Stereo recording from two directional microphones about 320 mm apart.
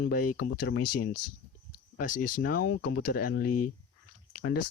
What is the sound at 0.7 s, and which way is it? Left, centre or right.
Speech, left.